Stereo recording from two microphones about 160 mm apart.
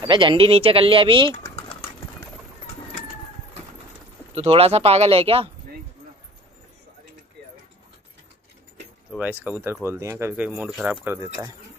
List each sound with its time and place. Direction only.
0.1 s speech: 30° right (ahead or behind)
4.4 s speech: 40° right (ahead or behind)
9.2 s speech: 10° right (ahead or behind)